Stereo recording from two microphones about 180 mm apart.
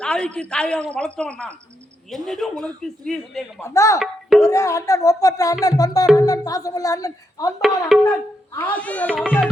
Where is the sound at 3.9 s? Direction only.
Centre (ahead or behind).